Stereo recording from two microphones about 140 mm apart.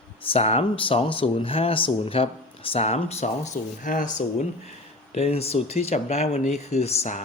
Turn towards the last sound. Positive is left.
turn(degrees=50)  # may be behind; listen again after turning